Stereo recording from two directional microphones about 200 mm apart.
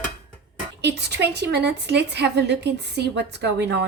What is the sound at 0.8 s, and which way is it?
A woman's voice, 55° right (ahead or behind).